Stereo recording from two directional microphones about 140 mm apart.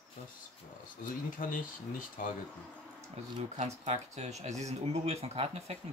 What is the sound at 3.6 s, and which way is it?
Speech, 55° right (ahead or behind).